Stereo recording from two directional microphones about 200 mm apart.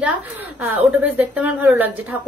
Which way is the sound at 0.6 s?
10° right (ahead or behind).